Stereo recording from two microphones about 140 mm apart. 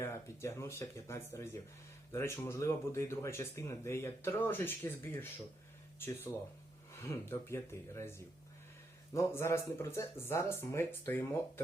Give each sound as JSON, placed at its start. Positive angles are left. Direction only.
{"t": 0.0, "sound": "speech", "side_deg": 20}
{"t": 7.0, "sound": "speech", "side_deg": 20}
{"t": 9.1, "sound": "speech", "side_deg": 20}